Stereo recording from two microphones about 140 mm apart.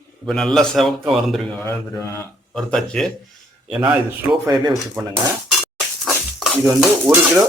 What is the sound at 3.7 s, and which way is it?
Dishes, 5° right (ahead or behind).